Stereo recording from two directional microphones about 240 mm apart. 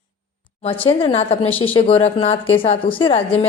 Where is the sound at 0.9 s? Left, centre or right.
Left.